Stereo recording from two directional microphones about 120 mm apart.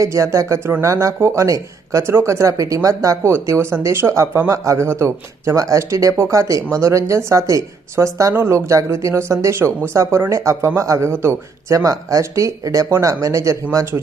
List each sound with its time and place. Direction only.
0.0 s speech: 25° right (ahead or behind)